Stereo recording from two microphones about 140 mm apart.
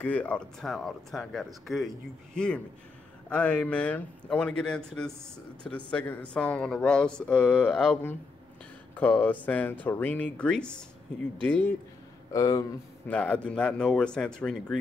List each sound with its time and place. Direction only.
0.0 s speech: 10° left (ahead or behind)
12.3 s speech: 25° left (ahead or behind)
13.1 s speech: 10° left (ahead or behind)